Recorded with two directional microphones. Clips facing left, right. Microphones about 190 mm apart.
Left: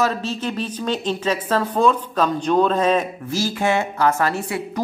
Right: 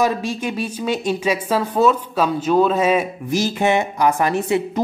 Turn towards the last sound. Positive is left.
turn(degrees=-20)  # may be behind; listen again after turning